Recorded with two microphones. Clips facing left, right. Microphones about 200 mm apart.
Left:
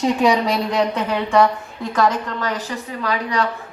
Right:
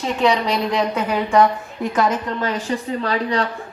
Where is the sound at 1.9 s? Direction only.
25° right (ahead or behind).